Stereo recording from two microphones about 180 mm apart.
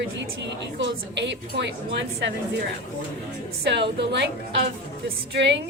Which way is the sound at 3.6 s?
70° right (ahead or behind).